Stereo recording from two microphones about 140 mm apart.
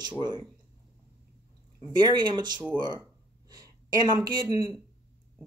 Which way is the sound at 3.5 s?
30° right (ahead or behind).